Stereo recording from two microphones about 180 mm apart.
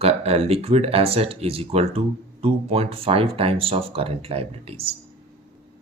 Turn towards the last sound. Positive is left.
turn(degrees=-30)  # may be behind; listen again after turning